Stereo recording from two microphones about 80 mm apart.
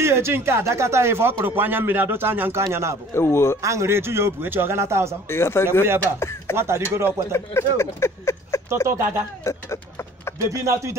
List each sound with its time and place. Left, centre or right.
0.0 s speech: right
3.2 s speech: left
3.6 s speech: right
5.3 s speech: left
6.5 s speech: right
7.3 s speech: left
8.8 s speech: right
9.4 s vehicle: left
10.5 s speech: right